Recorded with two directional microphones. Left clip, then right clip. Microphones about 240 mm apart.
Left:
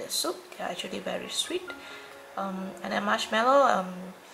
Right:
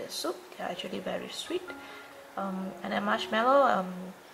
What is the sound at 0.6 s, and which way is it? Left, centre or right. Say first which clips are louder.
Speech: left 2 dB; centre.